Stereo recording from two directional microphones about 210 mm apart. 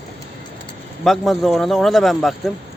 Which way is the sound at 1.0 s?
Centre (ahead or behind).